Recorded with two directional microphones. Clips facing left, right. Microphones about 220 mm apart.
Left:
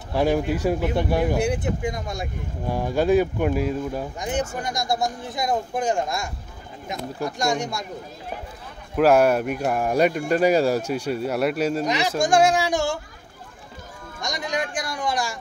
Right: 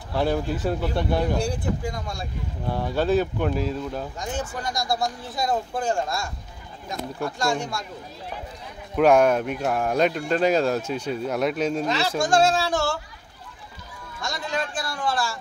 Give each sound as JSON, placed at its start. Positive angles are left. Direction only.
{"t": 0.1, "sound": "speech", "side_deg": 15}
{"t": 8.9, "sound": "speech", "side_deg": 5}
{"t": 14.2, "sound": "speech", "side_deg": 15}